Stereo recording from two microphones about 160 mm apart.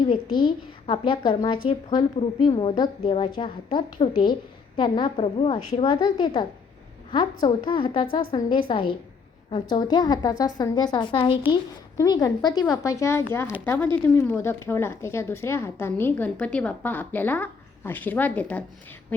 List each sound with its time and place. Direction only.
0.1 s a woman's voice: 30° left (ahead or behind); by 18.6 s 10° left (ahead or behind)